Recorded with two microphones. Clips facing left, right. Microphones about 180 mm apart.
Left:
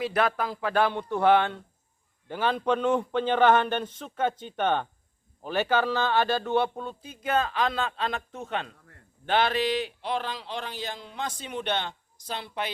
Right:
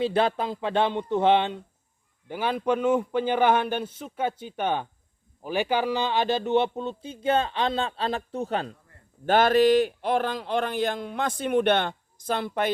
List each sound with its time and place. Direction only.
0.0 s a man's voice: 30° right (ahead or behind)
2.2 s a man's voice: 10° right (ahead or behind); by 12.7 s 50° right (ahead or behind)